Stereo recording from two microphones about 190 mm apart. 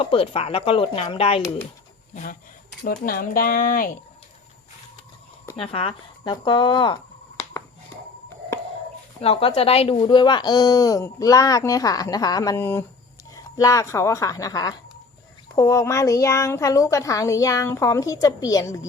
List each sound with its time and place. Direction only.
0.0 s speech: 30° left (ahead or behind)
2.8 s speech: 50° left (ahead or behind)
5.5 s speech: 30° left (ahead or behind)
9.2 s a woman's voice: 30° left (ahead or behind)